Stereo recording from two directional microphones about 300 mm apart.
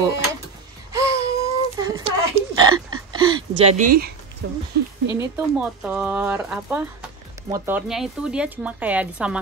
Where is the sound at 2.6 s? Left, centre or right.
Centre.